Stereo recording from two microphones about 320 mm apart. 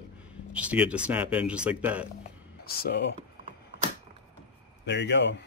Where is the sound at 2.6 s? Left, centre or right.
Left.